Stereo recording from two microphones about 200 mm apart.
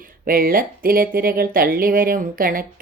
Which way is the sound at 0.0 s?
45° right (ahead or behind).